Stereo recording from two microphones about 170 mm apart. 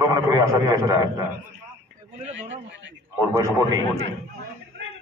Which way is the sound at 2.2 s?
40° right (ahead or behind).